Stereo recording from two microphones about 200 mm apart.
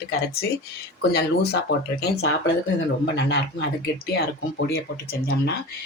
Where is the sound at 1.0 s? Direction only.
55° left (ahead or behind).